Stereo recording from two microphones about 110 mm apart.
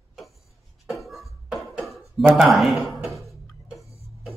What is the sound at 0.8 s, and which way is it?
Beatboxing, centre (ahead or behind).